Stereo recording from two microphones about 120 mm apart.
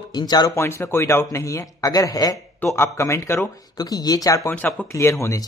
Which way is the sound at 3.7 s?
35° left (ahead or behind).